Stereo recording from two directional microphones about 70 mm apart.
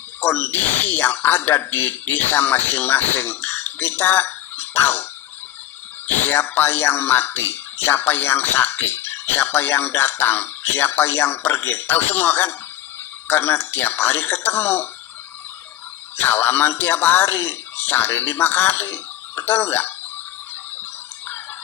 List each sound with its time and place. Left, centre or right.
0.2 s speech: left
6.1 s speech: left
16.1 s speech: left